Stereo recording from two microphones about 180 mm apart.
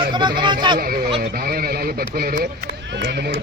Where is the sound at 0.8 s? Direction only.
55° right (ahead or behind).